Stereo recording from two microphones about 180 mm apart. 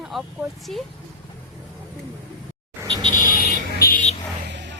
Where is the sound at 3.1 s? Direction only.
50° left (ahead or behind).